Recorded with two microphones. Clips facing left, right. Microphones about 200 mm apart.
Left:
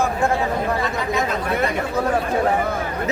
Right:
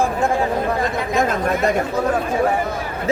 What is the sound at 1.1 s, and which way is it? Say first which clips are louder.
Speech: right 4 dB; 45° right (ahead or behind).